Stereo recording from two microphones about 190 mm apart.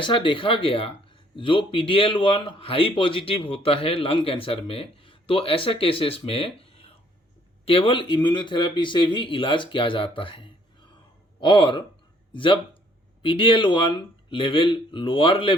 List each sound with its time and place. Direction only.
0.0 s a man's voice: 25° left (ahead or behind)